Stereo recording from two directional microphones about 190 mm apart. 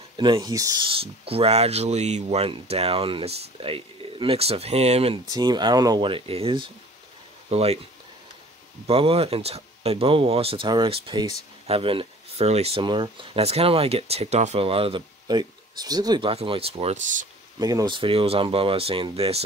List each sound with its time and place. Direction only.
0.2 s speech: 20° right (ahead or behind)
5.3 s speech: 20° right (ahead or behind)
8.8 s speech: 30° right (ahead or behind)
17.6 s speech: 20° right (ahead or behind)